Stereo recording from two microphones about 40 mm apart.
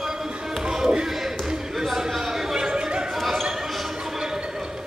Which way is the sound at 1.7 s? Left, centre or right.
Centre.